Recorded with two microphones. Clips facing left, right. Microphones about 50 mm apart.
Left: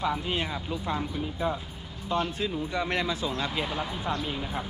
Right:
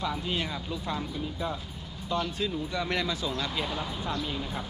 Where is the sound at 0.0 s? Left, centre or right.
Centre.